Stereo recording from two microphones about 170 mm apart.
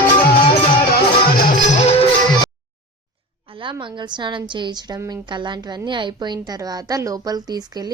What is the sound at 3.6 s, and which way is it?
A woman's voice, 30° right (ahead or behind).